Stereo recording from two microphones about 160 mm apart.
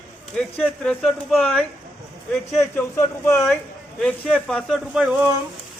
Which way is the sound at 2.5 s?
15° left (ahead or behind).